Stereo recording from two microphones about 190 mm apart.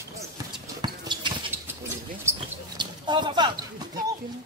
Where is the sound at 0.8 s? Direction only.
25° right (ahead or behind).